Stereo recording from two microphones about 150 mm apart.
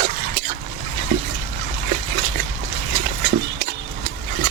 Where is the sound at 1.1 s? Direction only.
50° right (ahead or behind).